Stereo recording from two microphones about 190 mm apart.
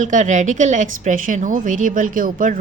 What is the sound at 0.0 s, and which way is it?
A woman's voice, 40° right (ahead or behind).